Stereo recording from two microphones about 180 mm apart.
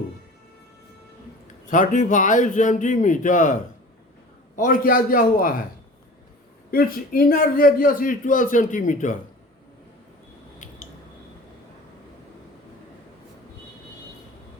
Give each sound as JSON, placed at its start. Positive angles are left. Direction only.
{"t": 1.7, "sound": "a man's voice", "side_deg": 45}
{"t": 6.7, "sound": "a man's voice", "side_deg": 55}